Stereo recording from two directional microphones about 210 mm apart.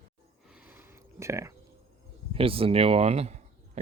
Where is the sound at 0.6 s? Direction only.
10° right (ahead or behind).